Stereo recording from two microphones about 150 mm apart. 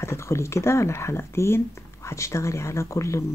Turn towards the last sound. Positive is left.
turn(degrees=20)  # may be behind; listen again after turning